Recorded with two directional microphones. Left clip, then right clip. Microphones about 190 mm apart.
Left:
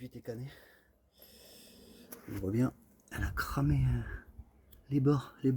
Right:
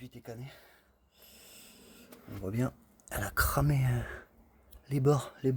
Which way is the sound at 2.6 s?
65° right (ahead or behind).